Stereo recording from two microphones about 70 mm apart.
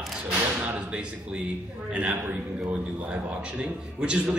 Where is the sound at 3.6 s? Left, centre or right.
Centre.